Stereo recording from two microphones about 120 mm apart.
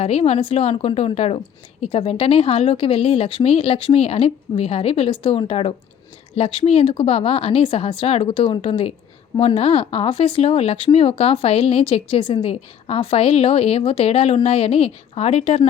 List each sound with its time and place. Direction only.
0.0 s a woman's voice: 60° left (ahead or behind)